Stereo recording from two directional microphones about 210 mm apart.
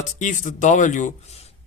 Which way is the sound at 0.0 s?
35° left (ahead or behind).